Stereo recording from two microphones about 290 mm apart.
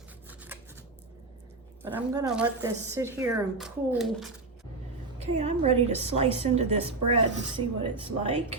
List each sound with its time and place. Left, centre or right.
0.3 s scissors: centre
1.8 s speech: centre
5.2 s a woman's voice: right